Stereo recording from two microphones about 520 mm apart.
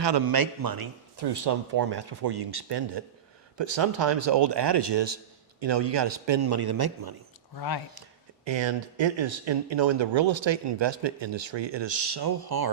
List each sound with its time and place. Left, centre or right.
0.0 s a man's voice: right
7.5 s speech: left
8.4 s speech: right